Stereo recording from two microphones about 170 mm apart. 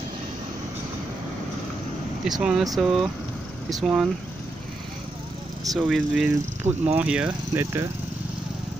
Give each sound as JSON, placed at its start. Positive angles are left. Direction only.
{"t": 2.2, "sound": "speech", "side_deg": 0}
{"t": 5.8, "sound": "speech", "side_deg": 0}
{"t": 6.7, "sound": "speech", "side_deg": -40}
{"t": 7.0, "sound": "speech", "side_deg": -5}